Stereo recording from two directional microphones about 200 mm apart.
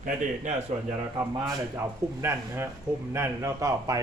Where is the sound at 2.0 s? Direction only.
15° right (ahead or behind).